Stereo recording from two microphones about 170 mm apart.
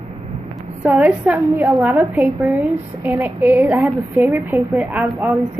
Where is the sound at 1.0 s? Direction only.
10° right (ahead or behind).